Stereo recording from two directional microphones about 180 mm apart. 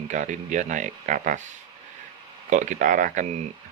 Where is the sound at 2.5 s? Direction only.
45° right (ahead or behind).